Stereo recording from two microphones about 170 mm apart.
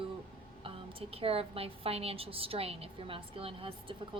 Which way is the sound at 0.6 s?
35° right (ahead or behind).